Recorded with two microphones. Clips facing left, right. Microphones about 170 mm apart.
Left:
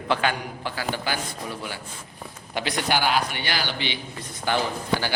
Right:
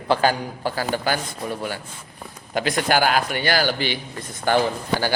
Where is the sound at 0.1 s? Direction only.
35° right (ahead or behind).